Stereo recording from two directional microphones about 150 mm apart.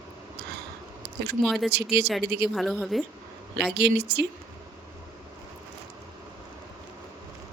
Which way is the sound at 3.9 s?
90° right.